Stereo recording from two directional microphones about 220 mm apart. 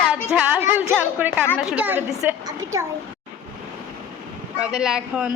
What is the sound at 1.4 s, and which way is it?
Speech, 5° left (ahead or behind).